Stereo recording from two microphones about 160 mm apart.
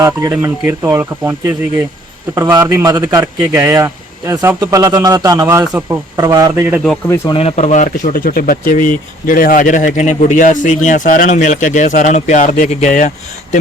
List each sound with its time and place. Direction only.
0.0 s speech: 20° right (ahead or behind)
7.3 s speech: 40° left (ahead or behind)